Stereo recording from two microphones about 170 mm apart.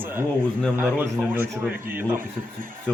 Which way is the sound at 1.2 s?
Centre (ahead or behind).